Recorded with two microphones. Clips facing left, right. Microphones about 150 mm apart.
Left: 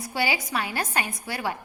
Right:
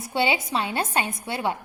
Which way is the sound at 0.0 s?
25° right (ahead or behind).